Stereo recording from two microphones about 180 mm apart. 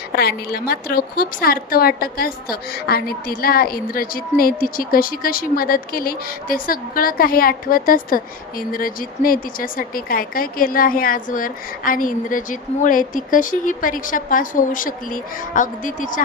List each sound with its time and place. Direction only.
0.2 s a woman's voice: 60° left (ahead or behind)